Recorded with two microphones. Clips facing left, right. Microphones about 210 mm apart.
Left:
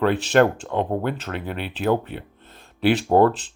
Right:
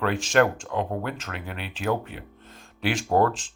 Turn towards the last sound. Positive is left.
turn(degrees=30)  # may be behind; listen again after turning